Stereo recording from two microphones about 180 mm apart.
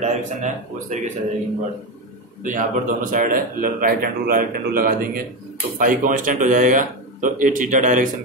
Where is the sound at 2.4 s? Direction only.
50° right (ahead or behind).